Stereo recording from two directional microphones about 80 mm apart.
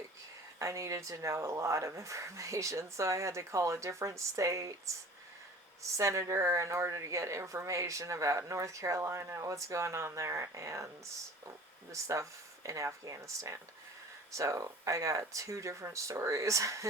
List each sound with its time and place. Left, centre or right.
0.6 s a woman's voice: right